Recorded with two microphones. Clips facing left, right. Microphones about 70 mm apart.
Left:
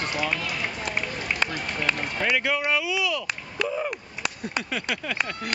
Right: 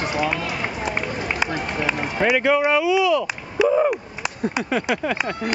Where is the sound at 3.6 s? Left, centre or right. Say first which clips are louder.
Right 11 dB; centre.